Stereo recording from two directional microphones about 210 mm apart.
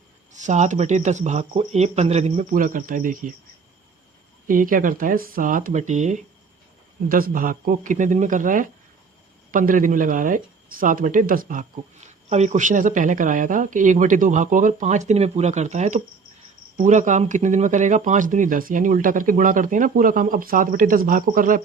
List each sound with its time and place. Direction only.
0.3 s speech: 35° right (ahead or behind)
4.4 s speech: 40° right (ahead or behind)